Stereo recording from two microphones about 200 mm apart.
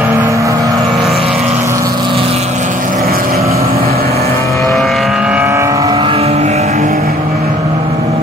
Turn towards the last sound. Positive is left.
turn(degrees=-35)  # may be behind; listen again after turning